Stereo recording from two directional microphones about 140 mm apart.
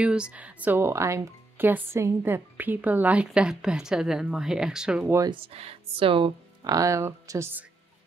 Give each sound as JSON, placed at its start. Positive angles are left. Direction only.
{"t": 0.0, "sound": "speech", "side_deg": -5}
{"t": 5.3, "sound": "speech", "side_deg": -45}
{"t": 6.6, "sound": "speech", "side_deg": -25}